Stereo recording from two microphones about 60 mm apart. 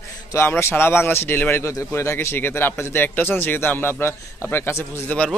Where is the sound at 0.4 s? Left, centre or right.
Left.